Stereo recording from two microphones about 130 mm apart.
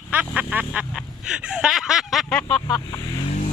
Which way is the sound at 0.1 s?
10° right (ahead or behind).